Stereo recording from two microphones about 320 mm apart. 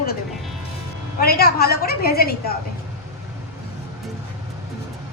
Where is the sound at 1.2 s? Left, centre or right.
Left.